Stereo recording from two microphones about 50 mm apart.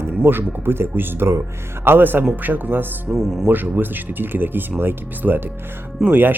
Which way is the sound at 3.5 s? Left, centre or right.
Right.